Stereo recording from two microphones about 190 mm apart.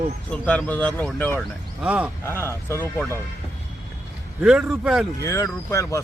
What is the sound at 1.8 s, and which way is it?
Speech, 5° right (ahead or behind).